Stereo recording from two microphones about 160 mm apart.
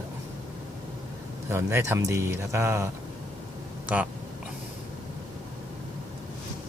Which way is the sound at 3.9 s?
10° right (ahead or behind).